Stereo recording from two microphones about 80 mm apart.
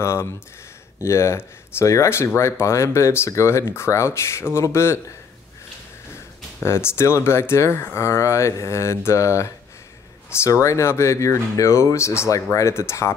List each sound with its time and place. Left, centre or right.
0.0 s speech: left
6.1 s speech: left